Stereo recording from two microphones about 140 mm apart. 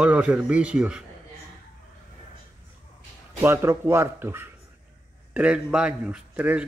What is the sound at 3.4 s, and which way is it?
Speech, 20° right (ahead or behind).